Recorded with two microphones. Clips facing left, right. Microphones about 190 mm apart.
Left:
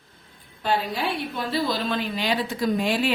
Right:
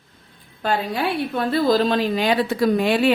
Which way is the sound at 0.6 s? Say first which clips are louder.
Right 3 dB; 55° right (ahead or behind).